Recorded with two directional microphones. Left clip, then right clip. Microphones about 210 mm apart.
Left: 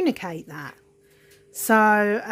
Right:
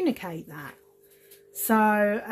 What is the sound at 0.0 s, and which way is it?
Speech, 30° left (ahead or behind).